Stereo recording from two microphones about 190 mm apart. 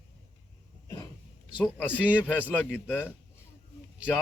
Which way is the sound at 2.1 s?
10° left (ahead or behind).